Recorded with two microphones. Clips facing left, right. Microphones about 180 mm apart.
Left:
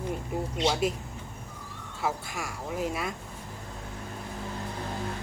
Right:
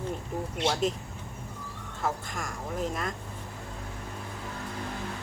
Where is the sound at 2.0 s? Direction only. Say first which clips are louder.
Left 1 dB; 10° left (ahead or behind).